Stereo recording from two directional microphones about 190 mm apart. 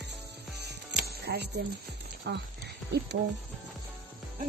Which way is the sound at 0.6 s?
60° right (ahead or behind).